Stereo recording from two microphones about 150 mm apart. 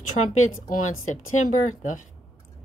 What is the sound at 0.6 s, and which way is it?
A woman's voice, 65° left (ahead or behind).